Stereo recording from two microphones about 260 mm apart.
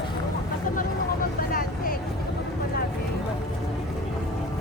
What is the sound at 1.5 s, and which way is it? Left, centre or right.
Vehicle, left.